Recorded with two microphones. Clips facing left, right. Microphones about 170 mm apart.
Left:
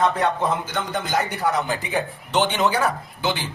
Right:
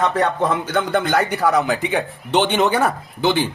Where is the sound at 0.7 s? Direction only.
65° right (ahead or behind).